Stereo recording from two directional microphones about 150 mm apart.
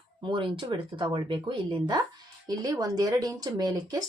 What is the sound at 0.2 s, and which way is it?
A woman's voice, 30° right (ahead or behind).